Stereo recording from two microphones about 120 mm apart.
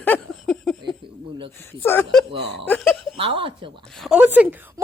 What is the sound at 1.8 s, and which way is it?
Speech, 15° left (ahead or behind).